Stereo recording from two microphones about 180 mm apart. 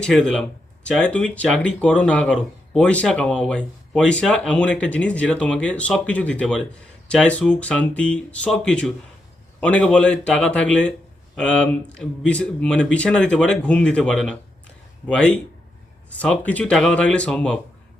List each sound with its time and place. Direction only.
0.0 s speech: 5° left (ahead or behind)